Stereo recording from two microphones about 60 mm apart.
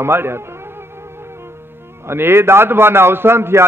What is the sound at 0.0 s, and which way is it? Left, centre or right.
Speech, right.